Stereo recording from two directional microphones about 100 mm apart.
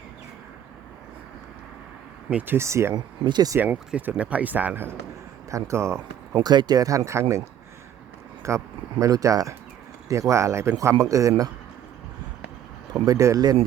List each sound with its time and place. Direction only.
2.6 s speech: 25° right (ahead or behind)
2.9 s speech: 45° right (ahead or behind)
3.6 s speech: 15° right (ahead or behind)
6.4 s speech: 45° right (ahead or behind)
12.9 s speech: 35° right (ahead or behind)